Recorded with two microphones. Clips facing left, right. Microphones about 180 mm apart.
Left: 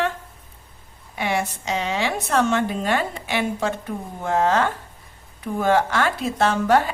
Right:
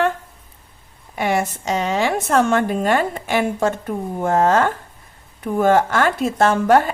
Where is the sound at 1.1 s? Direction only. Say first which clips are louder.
Right 4 dB; 45° right (ahead or behind).